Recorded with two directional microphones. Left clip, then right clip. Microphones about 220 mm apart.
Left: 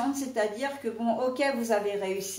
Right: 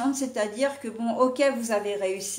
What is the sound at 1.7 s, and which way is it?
Speech, 45° right (ahead or behind).